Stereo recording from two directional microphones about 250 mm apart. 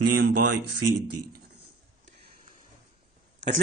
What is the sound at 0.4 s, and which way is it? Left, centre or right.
Speech, right.